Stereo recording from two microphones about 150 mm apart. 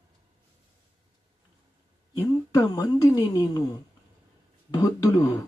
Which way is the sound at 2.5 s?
20° left (ahead or behind).